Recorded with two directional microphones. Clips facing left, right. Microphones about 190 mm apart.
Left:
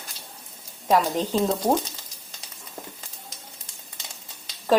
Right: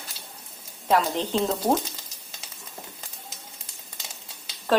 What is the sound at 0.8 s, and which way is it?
Speech, 10° left (ahead or behind).